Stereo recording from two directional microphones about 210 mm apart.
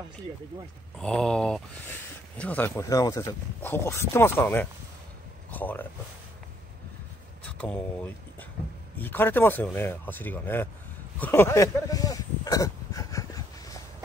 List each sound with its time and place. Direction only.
0.9 s speech: 5° left (ahead or behind)
7.4 s speech: 5° left (ahead or behind)
11.1 s a sound: 10° left (ahead or behind)